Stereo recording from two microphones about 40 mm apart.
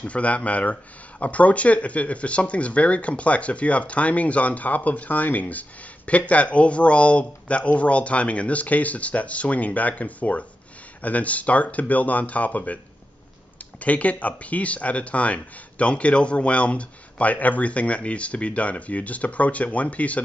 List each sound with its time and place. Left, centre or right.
0.0 s speech: left
13.7 s speech: left